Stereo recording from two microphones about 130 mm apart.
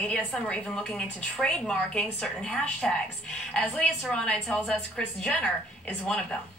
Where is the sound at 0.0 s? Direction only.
5° left (ahead or behind).